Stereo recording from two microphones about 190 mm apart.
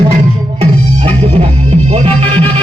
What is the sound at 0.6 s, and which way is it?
Music, 30° right (ahead or behind).